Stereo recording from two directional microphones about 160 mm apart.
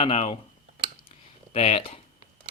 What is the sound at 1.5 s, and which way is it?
Speech, 40° left (ahead or behind).